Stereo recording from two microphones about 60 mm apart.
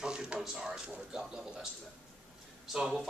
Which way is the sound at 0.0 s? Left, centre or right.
Centre.